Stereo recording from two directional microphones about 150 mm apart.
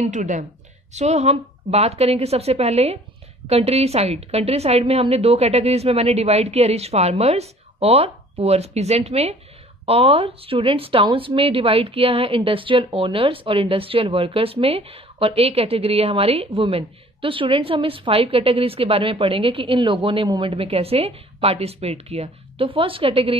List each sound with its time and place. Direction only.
0.0 s a woman's voice: 55° right (ahead or behind); by 23.3 s 40° right (ahead or behind)